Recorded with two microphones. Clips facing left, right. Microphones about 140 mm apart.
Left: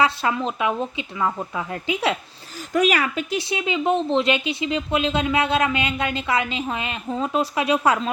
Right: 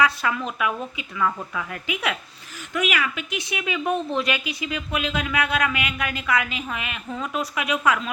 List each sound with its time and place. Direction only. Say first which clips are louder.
0.0 s speech: left 2 dB; 25° left (ahead or behind)